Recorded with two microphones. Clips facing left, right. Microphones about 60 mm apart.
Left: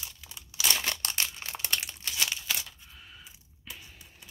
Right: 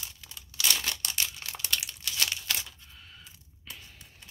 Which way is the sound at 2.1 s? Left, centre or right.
Centre.